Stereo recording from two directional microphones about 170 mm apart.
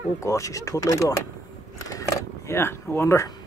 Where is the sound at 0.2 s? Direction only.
20° left (ahead or behind).